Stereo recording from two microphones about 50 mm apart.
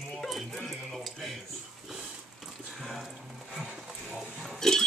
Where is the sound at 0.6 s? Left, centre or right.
Centre.